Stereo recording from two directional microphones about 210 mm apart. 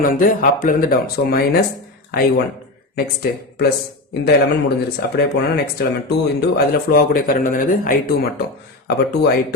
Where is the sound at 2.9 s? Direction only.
45° left (ahead or behind).